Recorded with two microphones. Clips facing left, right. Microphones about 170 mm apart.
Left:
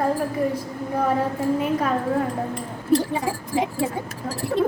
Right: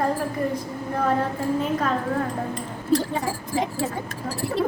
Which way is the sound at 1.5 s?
10° left (ahead or behind).